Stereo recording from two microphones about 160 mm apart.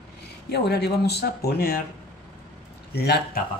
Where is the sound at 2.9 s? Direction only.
90° left.